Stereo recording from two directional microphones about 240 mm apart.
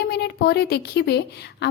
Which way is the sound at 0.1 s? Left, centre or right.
Left.